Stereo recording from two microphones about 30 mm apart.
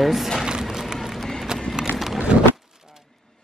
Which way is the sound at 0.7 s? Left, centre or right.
Centre.